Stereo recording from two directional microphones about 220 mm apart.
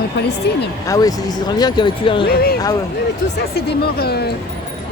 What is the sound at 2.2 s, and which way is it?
Speech, 45° left (ahead or behind).